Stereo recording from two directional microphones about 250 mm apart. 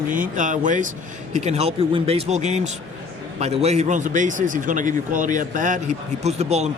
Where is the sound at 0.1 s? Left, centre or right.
Right.